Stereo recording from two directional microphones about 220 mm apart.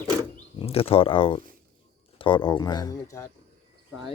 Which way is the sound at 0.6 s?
25° left (ahead or behind).